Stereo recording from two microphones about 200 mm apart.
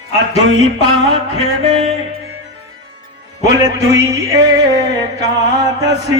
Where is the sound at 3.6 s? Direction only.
15° right (ahead or behind).